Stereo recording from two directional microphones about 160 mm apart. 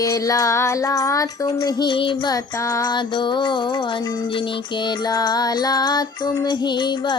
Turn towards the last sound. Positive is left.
turn(degrees=30)  # may be behind; listen again after turning